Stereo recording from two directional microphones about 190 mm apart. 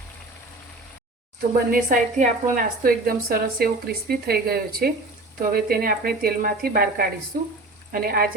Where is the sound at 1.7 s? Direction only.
45° right (ahead or behind).